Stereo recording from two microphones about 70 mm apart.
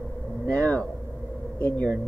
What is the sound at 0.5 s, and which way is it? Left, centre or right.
Speech, left.